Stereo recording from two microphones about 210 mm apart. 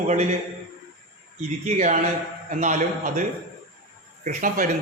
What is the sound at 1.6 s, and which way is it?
A man's voice, 35° right (ahead or behind).